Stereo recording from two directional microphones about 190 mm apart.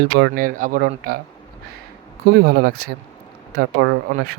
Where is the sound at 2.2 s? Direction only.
55° right (ahead or behind).